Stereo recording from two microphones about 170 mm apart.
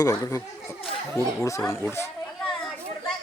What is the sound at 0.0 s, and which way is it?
Speech, 20° left (ahead or behind).